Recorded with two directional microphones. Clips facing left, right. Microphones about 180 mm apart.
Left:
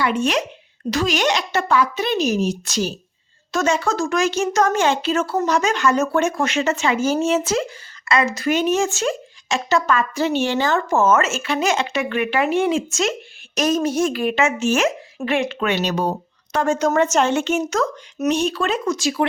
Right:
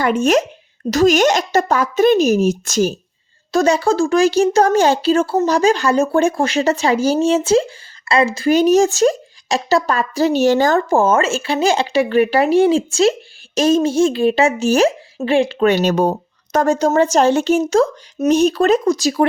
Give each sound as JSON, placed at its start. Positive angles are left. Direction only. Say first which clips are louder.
{"t": 0.0, "sound": "speech", "louder": "right 5 dB", "side_deg": -45}
{"t": 3.5, "sound": "speech", "louder": "right 6 dB", "side_deg": -35}